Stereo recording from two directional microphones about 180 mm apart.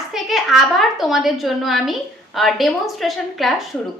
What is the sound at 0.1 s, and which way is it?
A woman's voice, centre (ahead or behind).